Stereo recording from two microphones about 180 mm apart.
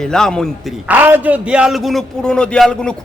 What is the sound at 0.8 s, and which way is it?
A man's voice, 10° right (ahead or behind).